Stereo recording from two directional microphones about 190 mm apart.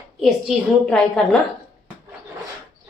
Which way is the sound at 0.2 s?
Centre (ahead or behind).